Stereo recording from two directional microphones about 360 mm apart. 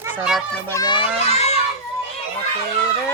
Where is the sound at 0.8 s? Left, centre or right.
Centre.